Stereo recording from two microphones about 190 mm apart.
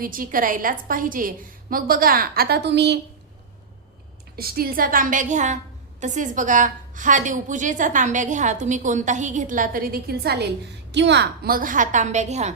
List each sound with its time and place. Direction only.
0.0 s a woman's voice: 45° right (ahead or behind); by 3.0 s 65° right (ahead or behind)
4.4 s a woman's voice: 55° right (ahead or behind); by 12.5 s 35° right (ahead or behind)